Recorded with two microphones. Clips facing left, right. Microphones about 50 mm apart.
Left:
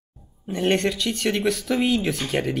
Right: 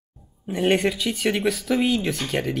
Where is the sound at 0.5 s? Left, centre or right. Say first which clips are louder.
Right 1 dB; centre.